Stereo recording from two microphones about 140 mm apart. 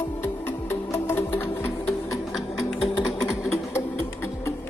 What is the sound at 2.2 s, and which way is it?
Sewing machine, centre (ahead or behind).